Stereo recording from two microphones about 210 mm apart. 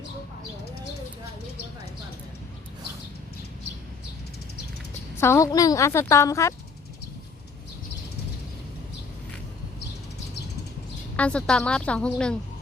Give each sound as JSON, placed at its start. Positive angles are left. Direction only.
{"t": 5.1, "sound": "a woman's voice", "side_deg": 10}
{"t": 11.2, "sound": "a woman's voice", "side_deg": 5}